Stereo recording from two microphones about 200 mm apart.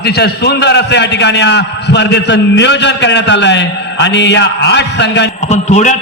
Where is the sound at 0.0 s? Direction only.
55° left (ahead or behind).